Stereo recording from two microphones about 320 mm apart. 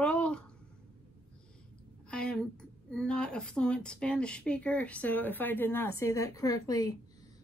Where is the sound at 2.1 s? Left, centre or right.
Centre.